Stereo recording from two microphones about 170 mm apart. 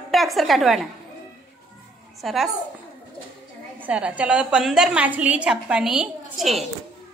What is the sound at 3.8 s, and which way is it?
A woman's voice, 10° right (ahead or behind).